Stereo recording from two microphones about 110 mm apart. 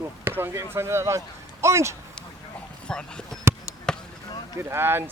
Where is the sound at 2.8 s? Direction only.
10° left (ahead or behind).